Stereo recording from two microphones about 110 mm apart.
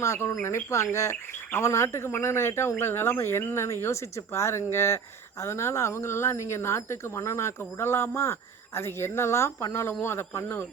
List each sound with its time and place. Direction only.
0.0 s speech: 25° left (ahead or behind)